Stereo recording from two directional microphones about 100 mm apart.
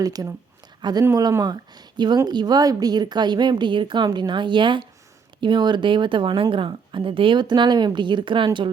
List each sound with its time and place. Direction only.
0.0 s a woman's voice: 40° right (ahead or behind)